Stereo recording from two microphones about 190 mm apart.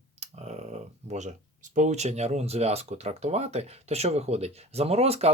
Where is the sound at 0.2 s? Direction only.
35° right (ahead or behind).